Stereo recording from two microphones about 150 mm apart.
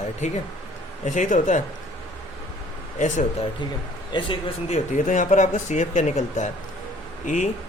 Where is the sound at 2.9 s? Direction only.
55° left (ahead or behind).